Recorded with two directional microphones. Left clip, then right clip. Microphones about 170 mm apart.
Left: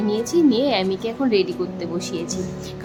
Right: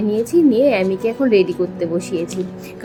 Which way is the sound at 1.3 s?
40° left (ahead or behind).